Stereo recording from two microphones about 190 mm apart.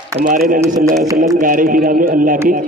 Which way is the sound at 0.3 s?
45° right (ahead or behind).